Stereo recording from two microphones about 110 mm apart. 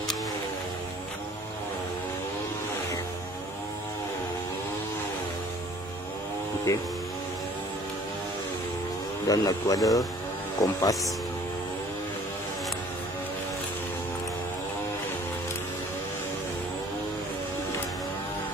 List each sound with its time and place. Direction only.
6.7 s speech: 30° left (ahead or behind)
9.3 s speech: 35° left (ahead or behind)